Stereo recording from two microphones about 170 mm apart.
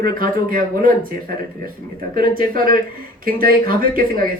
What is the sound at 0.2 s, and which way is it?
Speech, 55° right (ahead or behind).